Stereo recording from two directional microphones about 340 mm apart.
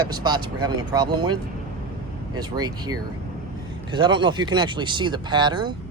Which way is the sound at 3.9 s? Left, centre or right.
Centre.